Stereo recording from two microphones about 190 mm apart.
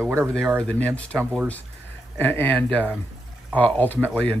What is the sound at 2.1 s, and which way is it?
Speech, 10° left (ahead or behind).